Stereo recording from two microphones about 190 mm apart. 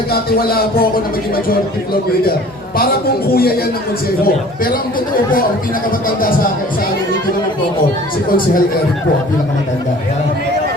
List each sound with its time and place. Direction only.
0.1 s speech: 55° left (ahead or behind)
2.7 s speech: 55° left (ahead or behind)